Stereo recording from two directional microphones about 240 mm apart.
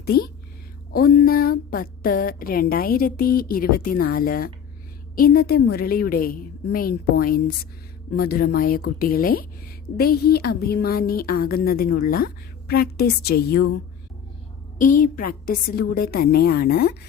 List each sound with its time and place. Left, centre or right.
0.0 s a woman's voice: left
14.8 s a woman's voice: left